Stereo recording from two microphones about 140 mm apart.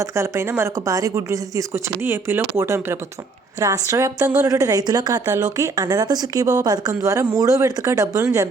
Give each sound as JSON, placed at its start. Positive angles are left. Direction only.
{"t": 0.0, "sound": "a woman's voice", "side_deg": -20}